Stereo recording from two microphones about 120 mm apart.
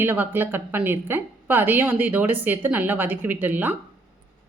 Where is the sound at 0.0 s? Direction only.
15° right (ahead or behind).